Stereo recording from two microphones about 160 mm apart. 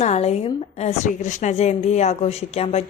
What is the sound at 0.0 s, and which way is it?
A woman's voice, 40° left (ahead or behind).